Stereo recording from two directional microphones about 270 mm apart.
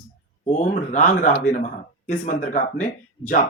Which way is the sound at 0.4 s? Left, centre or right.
Left.